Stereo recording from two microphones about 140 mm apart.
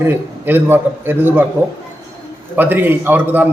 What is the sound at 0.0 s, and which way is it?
A man's voice, 15° right (ahead or behind).